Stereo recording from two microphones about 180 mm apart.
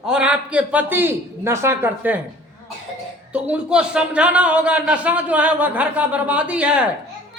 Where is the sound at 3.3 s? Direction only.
5° right (ahead or behind).